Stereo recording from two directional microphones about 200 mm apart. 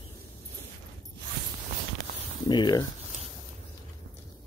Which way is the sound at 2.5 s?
20° left (ahead or behind).